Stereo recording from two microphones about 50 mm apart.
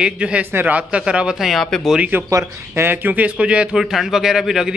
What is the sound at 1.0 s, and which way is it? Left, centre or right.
Speech, centre.